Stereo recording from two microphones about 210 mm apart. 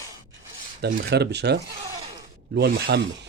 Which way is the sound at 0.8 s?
45° right (ahead or behind).